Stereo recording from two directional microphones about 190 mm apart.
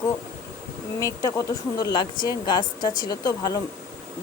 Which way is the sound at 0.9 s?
15° left (ahead or behind).